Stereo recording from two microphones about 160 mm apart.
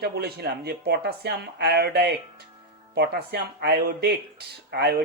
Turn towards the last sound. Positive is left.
turn(degrees=-85)